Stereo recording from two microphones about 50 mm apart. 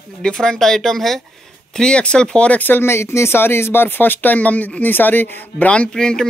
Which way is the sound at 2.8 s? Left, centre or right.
Left.